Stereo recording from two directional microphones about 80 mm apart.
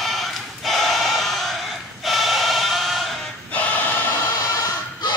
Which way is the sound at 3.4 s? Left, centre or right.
Centre.